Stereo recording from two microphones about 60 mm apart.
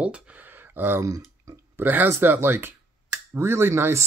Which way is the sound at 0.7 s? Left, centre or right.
Right.